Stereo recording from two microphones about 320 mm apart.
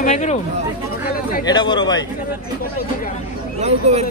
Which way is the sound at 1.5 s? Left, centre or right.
Centre.